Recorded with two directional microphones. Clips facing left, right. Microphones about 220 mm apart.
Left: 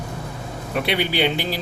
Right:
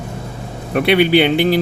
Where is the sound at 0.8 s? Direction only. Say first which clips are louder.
Right 9 dB; 65° right (ahead or behind).